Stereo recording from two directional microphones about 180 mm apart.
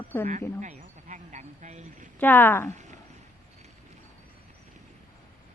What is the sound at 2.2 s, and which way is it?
Speech, 10° left (ahead or behind).